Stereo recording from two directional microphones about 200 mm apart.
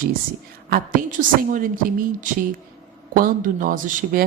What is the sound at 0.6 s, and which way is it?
Speech, 45° right (ahead or behind).